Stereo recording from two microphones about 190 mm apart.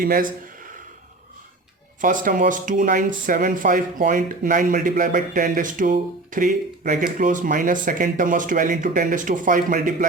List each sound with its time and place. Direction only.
0.0 s speech: 50° right (ahead or behind)
2.0 s speech: 45° right (ahead or behind)